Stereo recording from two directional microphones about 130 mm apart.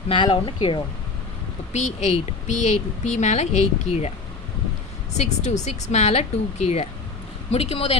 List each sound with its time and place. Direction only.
0.1 s speech: 40° left (ahead or behind)
1.7 s speech: 60° left (ahead or behind)
5.1 s speech: 60° left (ahead or behind)